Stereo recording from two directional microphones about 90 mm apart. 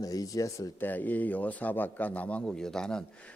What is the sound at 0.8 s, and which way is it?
A man's voice, 20° left (ahead or behind).